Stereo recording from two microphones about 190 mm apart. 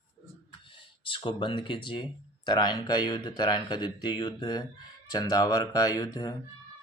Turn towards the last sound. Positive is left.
turn(degrees=20)  # may be behind; listen again after turning